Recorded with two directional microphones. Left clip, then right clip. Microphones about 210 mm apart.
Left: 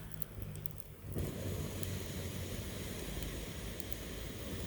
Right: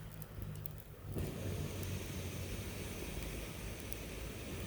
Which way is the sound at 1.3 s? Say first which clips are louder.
Left 1 dB; 15° left (ahead or behind).